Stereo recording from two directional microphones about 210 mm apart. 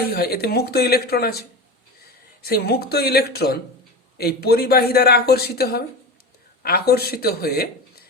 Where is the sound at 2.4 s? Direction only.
50° left (ahead or behind).